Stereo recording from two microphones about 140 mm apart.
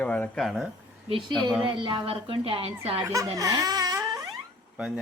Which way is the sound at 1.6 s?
35° right (ahead or behind).